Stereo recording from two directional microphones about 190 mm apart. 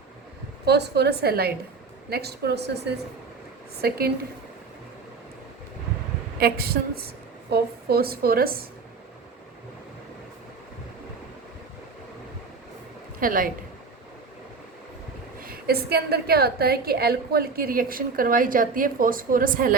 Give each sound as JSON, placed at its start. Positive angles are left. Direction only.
{"t": 0.6, "sound": "a woman's voice", "side_deg": -60}
{"t": 6.4, "sound": "a woman's voice", "side_deg": -50}
{"t": 13.1, "sound": "speech", "side_deg": -45}
{"t": 15.4, "sound": "a woman's voice", "side_deg": -50}